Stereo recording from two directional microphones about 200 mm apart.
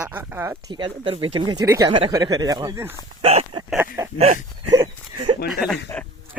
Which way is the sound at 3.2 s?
30° right (ahead or behind).